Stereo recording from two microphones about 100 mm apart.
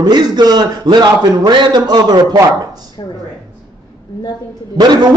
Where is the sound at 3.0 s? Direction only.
50° left (ahead or behind).